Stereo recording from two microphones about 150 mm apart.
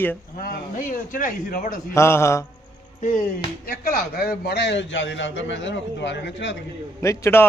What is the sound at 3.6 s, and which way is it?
Speech, 75° left (ahead or behind).